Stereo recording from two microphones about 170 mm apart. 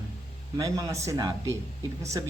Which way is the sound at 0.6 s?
20° right (ahead or behind).